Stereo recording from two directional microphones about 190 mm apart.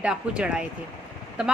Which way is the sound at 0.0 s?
5° right (ahead or behind).